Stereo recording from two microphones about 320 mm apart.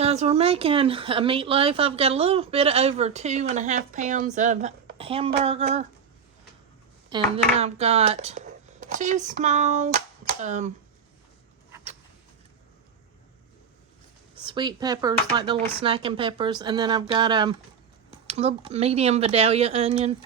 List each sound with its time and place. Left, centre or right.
0.0 s speech: centre
7.1 s speech: centre
14.4 s speech: centre